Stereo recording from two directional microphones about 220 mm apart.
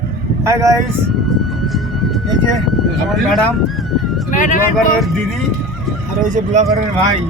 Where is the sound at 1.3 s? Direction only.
Centre (ahead or behind).